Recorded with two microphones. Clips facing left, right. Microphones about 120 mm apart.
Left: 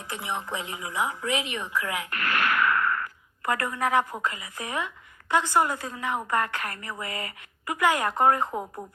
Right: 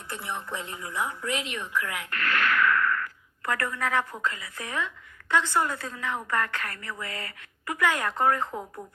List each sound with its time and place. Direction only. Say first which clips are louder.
0.1 s a woman's voice: left 2 dB; 15° left (ahead or behind)